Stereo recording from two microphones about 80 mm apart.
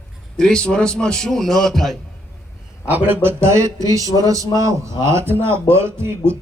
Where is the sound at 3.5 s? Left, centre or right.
Right.